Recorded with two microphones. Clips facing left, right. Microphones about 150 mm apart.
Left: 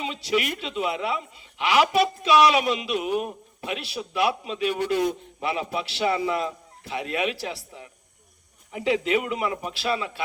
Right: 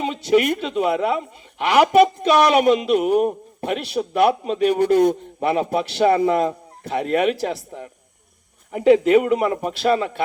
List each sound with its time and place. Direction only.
0.0 s a woman's voice: 50° right (ahead or behind)